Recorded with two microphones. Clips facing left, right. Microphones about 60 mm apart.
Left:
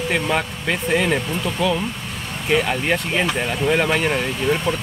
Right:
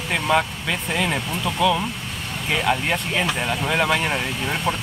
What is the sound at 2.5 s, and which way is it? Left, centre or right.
Speech, centre.